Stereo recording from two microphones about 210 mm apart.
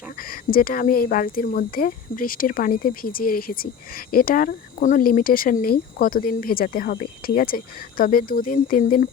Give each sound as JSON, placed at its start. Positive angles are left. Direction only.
{"t": 0.2, "sound": "speech", "side_deg": 45}